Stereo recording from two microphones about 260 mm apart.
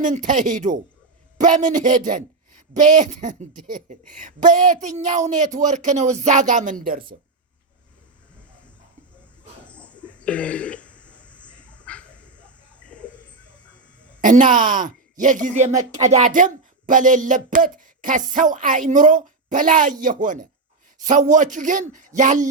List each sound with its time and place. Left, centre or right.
0.0 s speech: right
9.6 s throat clearing: centre
14.3 s speech: right